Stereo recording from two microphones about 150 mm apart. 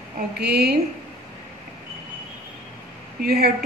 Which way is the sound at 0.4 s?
90° right.